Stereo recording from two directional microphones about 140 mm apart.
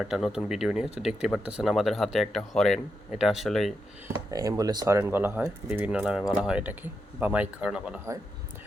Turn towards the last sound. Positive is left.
turn(degrees=-5)  # may be behind; listen again after turning